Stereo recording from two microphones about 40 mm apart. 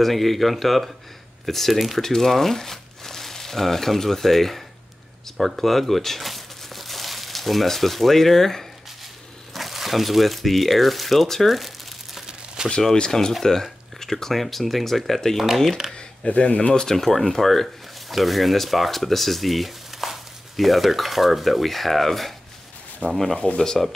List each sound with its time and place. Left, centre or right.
0.0 s speech: centre
2.0 s speech: centre
9.5 s speech: centre
12.6 s a sound: centre
12.9 s speech: centre
16.3 s speech: left
16.7 s speech: centre